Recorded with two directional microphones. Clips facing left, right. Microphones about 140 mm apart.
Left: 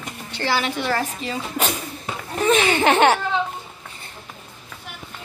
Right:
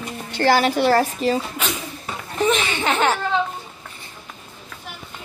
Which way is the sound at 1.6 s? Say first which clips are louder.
Left 2 dB; 45° left (ahead or behind).